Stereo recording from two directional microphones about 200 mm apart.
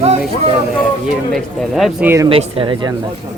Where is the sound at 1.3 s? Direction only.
Centre (ahead or behind).